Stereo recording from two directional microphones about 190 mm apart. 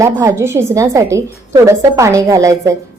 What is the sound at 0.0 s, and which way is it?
A woman's voice, 15° right (ahead or behind).